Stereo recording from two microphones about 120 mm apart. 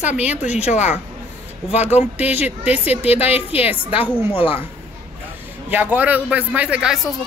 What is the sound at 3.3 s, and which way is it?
Speech, 55° left (ahead or behind).